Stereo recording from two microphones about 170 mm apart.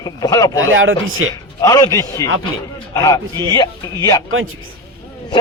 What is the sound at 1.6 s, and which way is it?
Speech, 20° left (ahead or behind).